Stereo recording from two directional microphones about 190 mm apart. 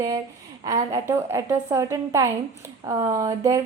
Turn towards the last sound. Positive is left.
turn(degrees=-15)  # may be behind; listen again after turning